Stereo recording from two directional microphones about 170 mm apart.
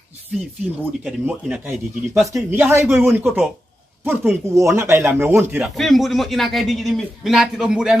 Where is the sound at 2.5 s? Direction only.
15° right (ahead or behind).